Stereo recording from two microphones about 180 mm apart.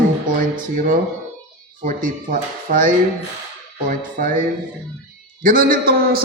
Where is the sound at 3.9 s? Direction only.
50° right (ahead or behind).